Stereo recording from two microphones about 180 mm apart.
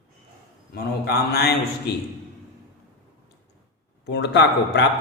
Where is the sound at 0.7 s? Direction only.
60° left (ahead or behind).